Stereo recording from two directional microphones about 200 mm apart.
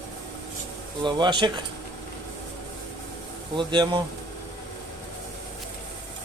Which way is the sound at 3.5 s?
25° right (ahead or behind).